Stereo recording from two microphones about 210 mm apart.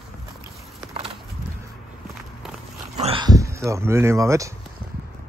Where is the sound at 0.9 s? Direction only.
25° right (ahead or behind).